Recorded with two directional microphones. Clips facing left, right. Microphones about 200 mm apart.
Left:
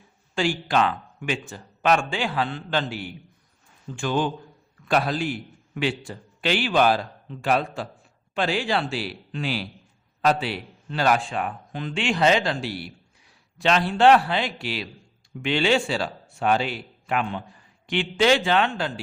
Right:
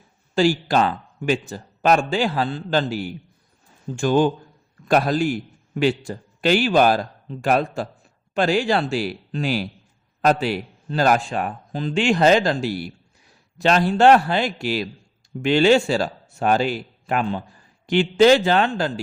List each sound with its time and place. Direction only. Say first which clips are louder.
0.3 s a man's voice: right 5 dB; 40° right (ahead or behind)